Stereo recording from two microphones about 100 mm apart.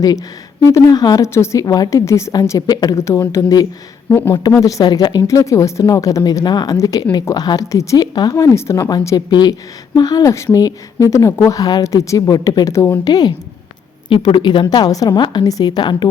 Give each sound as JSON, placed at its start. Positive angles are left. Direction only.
{"t": 0.0, "sound": "a woman's voice", "side_deg": 40}
{"t": 1.2, "sound": "a woman's voice", "side_deg": 30}
{"t": 1.6, "sound": "a woman's voice", "side_deg": 40}
{"t": 5.4, "sound": "a woman's voice", "side_deg": 30}
{"t": 8.9, "sound": "a woman's voice", "side_deg": 40}
{"t": 14.1, "sound": "a woman's voice", "side_deg": 55}